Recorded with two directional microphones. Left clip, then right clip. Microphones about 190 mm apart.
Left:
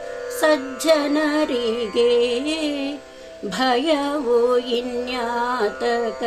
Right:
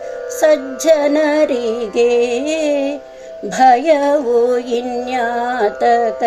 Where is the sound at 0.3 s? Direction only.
20° left (ahead or behind).